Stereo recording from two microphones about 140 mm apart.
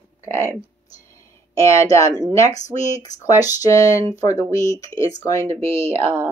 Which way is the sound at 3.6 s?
25° left (ahead or behind).